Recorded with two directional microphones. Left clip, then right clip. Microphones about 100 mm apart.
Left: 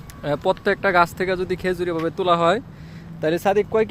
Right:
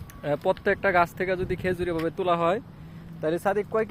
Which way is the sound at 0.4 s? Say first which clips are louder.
Left 4 dB; 5° left (ahead or behind).